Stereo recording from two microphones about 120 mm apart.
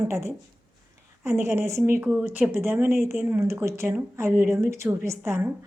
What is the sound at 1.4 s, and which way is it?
A woman's voice, 20° right (ahead or behind).